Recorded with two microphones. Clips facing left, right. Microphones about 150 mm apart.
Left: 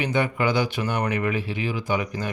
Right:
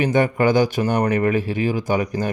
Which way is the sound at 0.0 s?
45° right (ahead or behind).